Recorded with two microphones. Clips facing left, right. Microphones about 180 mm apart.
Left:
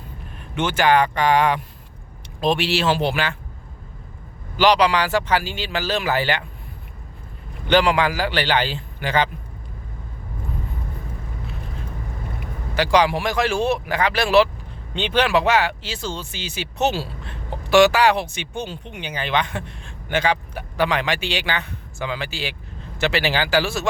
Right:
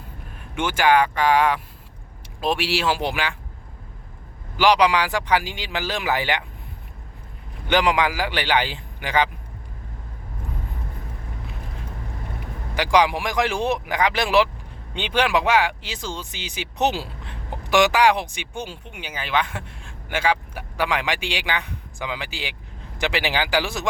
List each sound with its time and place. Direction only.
0.5 s speech: 10° right (ahead or behind)
4.5 s speech: 10° right (ahead or behind)
7.7 s speech: 15° right (ahead or behind)
12.7 s speech: 15° right (ahead or behind)